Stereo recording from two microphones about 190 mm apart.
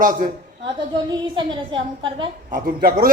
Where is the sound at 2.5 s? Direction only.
45° right (ahead or behind).